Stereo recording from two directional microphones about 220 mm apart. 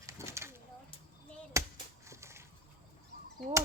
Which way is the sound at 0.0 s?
15° right (ahead or behind).